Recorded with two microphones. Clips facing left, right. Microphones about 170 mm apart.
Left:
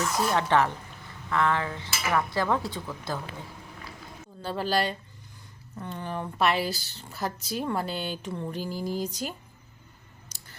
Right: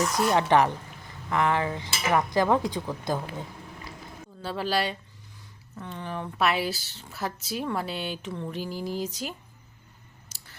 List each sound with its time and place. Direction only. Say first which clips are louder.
0.3 s speech: right 3 dB; 15° right (ahead or behind)
4.4 s speech: left 1 dB; centre (ahead or behind)
10.2 s a sound: left 1 dB; 5° right (ahead or behind)